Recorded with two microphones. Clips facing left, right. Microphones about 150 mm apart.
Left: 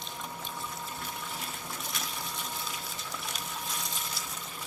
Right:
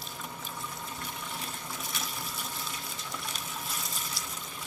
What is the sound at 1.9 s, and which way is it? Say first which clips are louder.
Water: right 1 dB; centre (ahead or behind).